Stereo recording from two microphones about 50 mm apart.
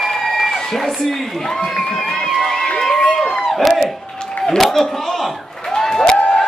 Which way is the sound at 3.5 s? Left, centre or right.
Centre.